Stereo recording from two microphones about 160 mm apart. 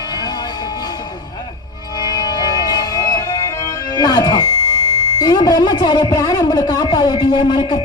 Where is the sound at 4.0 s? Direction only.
25° left (ahead or behind).